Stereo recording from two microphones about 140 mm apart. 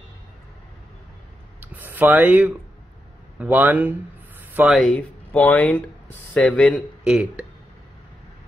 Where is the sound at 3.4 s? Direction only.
10° right (ahead or behind).